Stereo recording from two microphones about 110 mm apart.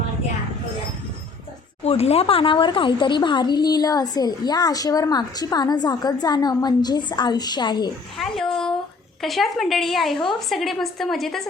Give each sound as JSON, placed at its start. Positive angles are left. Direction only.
{"t": 1.8, "sound": "speech", "side_deg": 70}
{"t": 8.2, "sound": "a woman's voice", "side_deg": 5}